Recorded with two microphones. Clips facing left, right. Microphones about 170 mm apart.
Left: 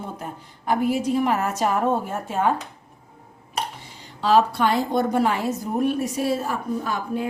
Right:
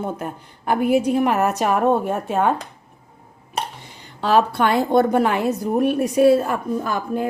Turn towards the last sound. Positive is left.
turn(degrees=-50)  # may be behind; listen again after turning